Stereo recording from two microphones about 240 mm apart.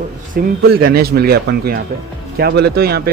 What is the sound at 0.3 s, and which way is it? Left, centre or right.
Speech, right.